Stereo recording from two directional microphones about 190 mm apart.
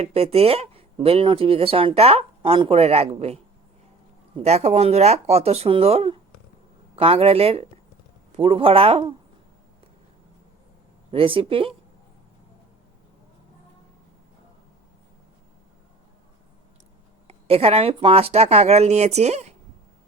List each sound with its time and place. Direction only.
0.0 s speech: 30° right (ahead or behind)
4.4 s speech: 35° right (ahead or behind)
11.1 s speech: 30° right (ahead or behind)
17.2 s speech: 30° right (ahead or behind)